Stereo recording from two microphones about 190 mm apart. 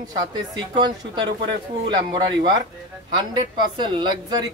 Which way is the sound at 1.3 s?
65° right (ahead or behind).